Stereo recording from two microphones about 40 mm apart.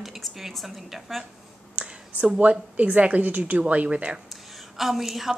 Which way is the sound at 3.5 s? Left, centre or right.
Right.